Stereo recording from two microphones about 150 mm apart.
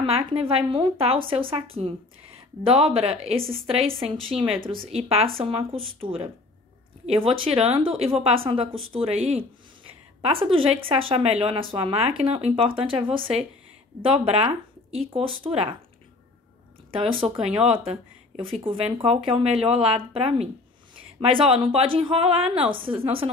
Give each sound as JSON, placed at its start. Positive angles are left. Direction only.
{"t": 0.0, "sound": "speech", "side_deg": -40}
{"t": 10.2, "sound": "speech", "side_deg": -35}
{"t": 17.5, "sound": "speech", "side_deg": 0}
{"t": 17.7, "sound": "speech", "side_deg": -35}